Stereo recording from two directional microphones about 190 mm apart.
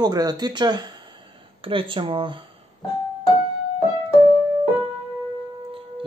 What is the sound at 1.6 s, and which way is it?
Music, 30° right (ahead or behind).